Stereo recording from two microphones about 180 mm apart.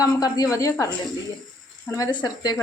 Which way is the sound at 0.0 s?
20° left (ahead or behind).